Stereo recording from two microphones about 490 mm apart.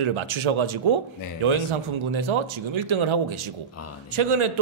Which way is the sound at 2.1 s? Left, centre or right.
Right.